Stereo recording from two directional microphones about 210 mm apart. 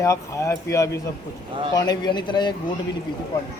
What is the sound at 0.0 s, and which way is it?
A man's voice, 15° left (ahead or behind).